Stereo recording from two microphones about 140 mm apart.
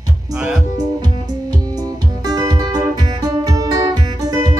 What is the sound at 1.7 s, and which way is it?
Music, 30° right (ahead or behind).